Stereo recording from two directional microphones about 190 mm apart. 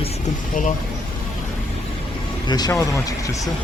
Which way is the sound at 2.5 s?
20° left (ahead or behind).